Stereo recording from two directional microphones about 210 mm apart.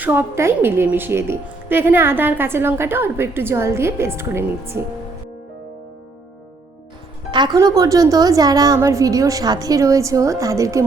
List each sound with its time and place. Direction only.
0.0 s a woman's voice: 10° right (ahead or behind)
7.3 s a woman's voice: 20° right (ahead or behind)